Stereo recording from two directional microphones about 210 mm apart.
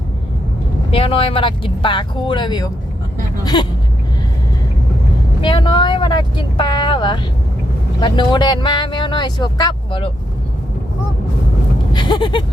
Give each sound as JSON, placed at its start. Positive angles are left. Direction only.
{"t": 0.9, "sound": "speech", "side_deg": 25}
{"t": 5.4, "sound": "speech", "side_deg": 20}
{"t": 11.9, "sound": "a sound", "side_deg": 20}